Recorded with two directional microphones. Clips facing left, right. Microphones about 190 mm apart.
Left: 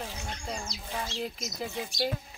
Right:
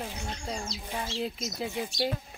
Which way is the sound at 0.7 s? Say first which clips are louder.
Right 1 dB; 25° right (ahead or behind).